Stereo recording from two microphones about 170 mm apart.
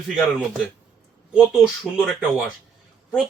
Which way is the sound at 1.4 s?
5° right (ahead or behind).